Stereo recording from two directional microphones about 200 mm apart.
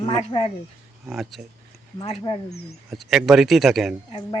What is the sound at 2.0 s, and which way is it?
Speech, 30° left (ahead or behind).